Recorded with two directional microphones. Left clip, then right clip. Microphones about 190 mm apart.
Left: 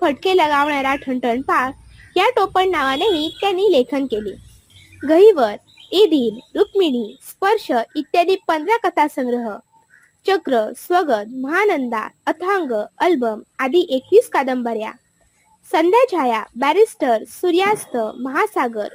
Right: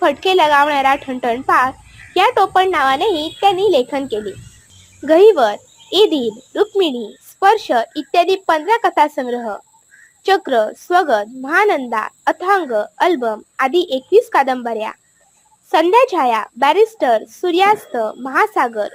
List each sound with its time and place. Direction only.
0.0 s a woman's voice: 25° left (ahead or behind)